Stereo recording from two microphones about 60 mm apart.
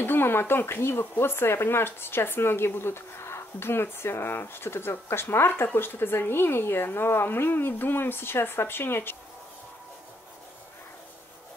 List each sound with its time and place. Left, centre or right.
0.0 s speech: left